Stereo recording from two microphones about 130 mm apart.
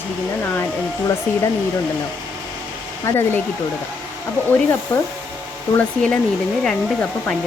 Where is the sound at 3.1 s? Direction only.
15° left (ahead or behind).